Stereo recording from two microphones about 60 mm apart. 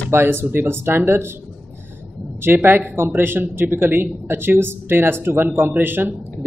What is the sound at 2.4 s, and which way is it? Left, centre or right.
A man's voice, right.